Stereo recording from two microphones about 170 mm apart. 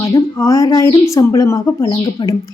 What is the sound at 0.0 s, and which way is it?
Speech, 20° left (ahead or behind).